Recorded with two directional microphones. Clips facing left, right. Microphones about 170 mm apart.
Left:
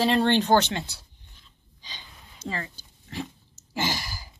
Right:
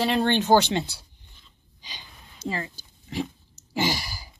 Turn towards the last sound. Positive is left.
turn(degrees=-15)  # may be behind; listen again after turning